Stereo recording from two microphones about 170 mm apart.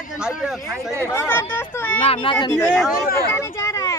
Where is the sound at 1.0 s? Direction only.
15° left (ahead or behind).